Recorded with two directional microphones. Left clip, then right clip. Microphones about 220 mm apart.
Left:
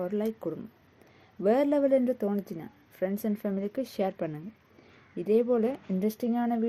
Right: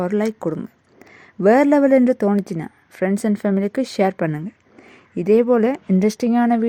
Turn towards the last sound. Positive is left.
turn(degrees=-40)  # may be behind; listen again after turning